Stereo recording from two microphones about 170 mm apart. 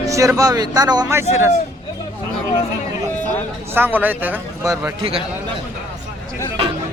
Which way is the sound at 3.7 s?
10° right (ahead or behind).